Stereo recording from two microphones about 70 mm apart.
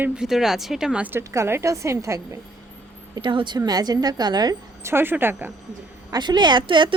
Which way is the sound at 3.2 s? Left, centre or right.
Right.